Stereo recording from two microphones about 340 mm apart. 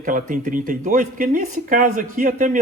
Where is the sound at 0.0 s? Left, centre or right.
Right.